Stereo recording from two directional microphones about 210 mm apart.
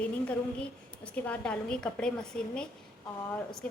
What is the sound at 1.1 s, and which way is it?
A woman's voice, 5° left (ahead or behind).